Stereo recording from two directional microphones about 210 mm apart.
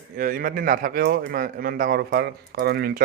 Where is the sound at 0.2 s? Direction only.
40° right (ahead or behind).